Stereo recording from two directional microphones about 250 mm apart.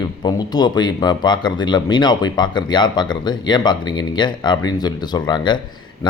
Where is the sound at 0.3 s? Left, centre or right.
Centre.